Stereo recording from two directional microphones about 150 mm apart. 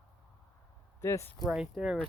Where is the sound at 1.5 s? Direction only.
5° right (ahead or behind).